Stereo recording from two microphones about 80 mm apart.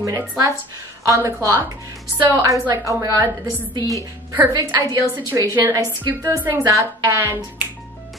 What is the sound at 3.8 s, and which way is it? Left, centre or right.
Speech, left.